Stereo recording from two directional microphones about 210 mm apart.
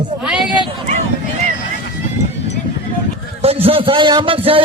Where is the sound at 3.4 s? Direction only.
30° right (ahead or behind).